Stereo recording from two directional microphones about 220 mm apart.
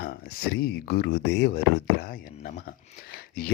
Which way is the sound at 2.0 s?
40° left (ahead or behind).